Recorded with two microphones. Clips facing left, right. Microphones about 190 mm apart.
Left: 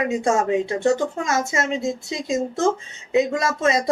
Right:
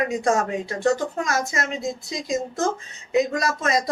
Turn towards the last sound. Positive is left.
turn(degrees=25)  # may be behind; listen again after turning